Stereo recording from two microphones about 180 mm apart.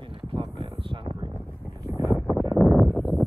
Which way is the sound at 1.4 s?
10° left (ahead or behind).